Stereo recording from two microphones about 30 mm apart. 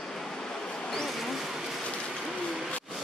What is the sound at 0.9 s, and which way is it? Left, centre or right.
Vehicle, centre.